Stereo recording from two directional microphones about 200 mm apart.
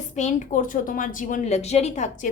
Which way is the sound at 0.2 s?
40° left (ahead or behind).